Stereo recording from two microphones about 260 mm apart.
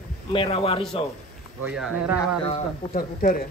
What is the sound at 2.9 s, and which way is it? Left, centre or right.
Speech, left.